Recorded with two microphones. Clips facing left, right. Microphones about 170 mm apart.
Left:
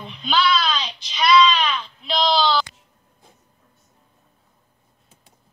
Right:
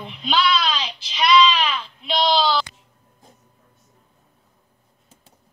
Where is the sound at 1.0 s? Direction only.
30° right (ahead or behind).